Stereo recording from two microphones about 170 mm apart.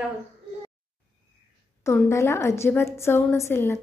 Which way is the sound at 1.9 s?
15° left (ahead or behind).